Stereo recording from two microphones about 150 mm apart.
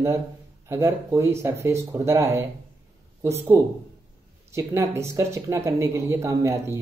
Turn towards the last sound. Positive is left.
turn(degrees=-20)  # may be behind; listen again after turning